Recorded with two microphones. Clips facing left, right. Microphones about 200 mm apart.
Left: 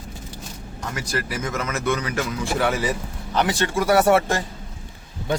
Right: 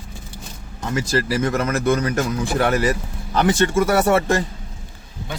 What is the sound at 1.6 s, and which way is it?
Speech, 50° right (ahead or behind).